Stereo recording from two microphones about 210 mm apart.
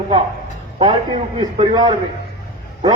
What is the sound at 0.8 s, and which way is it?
A man's voice, 25° right (ahead or behind).